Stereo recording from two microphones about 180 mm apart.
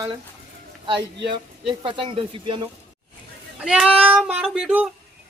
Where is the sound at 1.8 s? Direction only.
30° right (ahead or behind).